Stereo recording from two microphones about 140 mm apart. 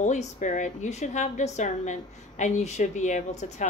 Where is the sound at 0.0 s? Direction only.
60° left (ahead or behind).